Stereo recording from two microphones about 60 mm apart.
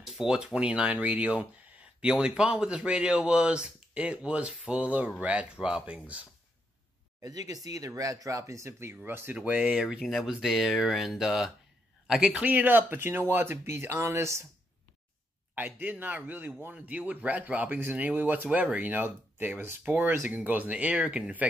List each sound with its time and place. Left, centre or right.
0.0 s speech: centre
7.2 s speech: right
9.3 s speech: right
9.8 s speech: centre
12.4 s speech: right
15.5 s speech: right